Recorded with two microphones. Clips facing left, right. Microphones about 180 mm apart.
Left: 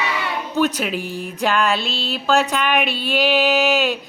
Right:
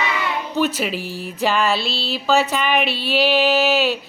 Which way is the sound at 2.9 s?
50° left (ahead or behind).